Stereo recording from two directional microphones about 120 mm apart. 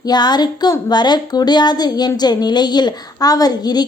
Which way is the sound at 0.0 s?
35° left (ahead or behind).